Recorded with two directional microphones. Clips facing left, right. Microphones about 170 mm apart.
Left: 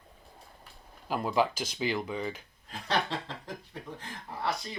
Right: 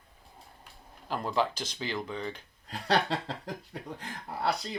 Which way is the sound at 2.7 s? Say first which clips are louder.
Right 3 dB; 40° right (ahead or behind).